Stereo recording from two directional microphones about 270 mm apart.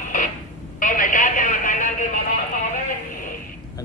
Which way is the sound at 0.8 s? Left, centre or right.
Left.